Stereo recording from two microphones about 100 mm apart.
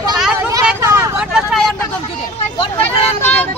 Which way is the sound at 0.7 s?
30° right (ahead or behind).